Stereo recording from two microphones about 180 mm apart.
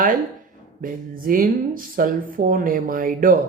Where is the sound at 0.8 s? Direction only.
50° right (ahead or behind).